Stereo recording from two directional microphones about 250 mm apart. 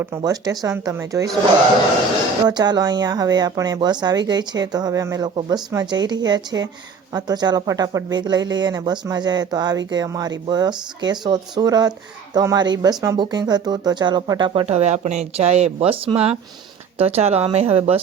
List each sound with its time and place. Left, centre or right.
0.0 s speech: centre
2.5 s speech: centre